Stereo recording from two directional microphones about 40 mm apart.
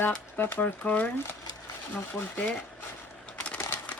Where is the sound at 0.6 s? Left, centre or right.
Left.